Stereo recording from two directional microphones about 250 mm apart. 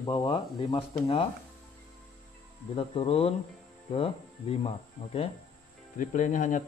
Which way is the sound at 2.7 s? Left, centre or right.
Left.